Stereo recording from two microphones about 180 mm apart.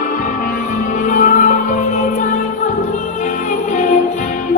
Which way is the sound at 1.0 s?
45° left (ahead or behind).